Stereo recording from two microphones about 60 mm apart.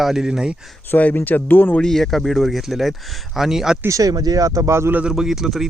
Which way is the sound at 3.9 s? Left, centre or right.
Right.